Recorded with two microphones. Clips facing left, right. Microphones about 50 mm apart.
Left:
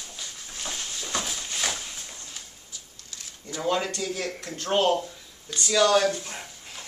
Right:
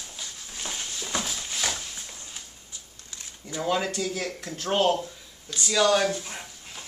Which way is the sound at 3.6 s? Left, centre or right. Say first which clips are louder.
Even; centre.